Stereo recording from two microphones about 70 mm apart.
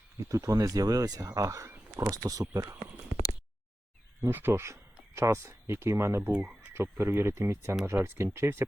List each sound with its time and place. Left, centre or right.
0.2 s speech: right
4.2 s speech: right
6.3 s speech: centre
7.0 s speech: right